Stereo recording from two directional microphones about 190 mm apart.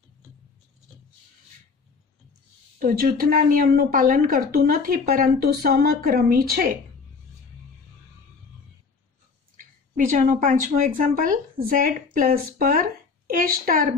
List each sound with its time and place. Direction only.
2.8 s speech: 50° right (ahead or behind)
9.6 s speech: 45° right (ahead or behind)